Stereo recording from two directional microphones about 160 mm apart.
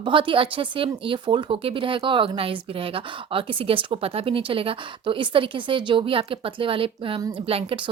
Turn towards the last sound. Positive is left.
turn(degrees=-35)  # may be behind; listen again after turning